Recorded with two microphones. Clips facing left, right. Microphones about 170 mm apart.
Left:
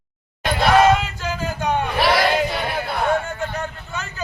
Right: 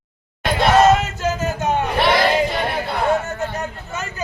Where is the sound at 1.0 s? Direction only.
45° right (ahead or behind).